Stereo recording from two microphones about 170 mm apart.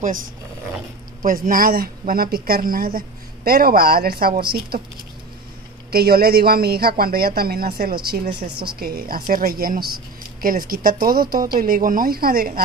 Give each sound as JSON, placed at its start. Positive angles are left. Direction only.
{"t": 1.2, "sound": "speech", "side_deg": -55}
{"t": 5.9, "sound": "speech", "side_deg": -65}